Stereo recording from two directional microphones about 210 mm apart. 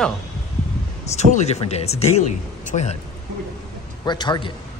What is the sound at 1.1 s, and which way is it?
Speech, 30° left (ahead or behind).